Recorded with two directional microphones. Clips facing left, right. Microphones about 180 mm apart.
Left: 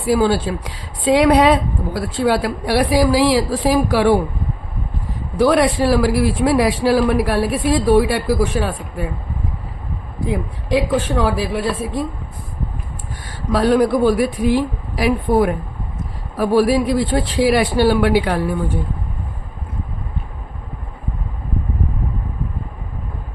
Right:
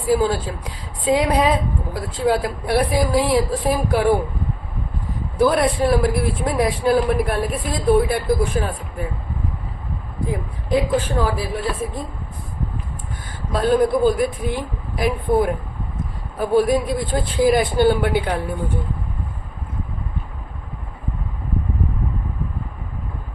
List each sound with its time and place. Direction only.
0.0 s a woman's voice: 80° left
5.4 s a woman's voice: 80° left
10.2 s a woman's voice: 80° left
13.5 s speech: 80° left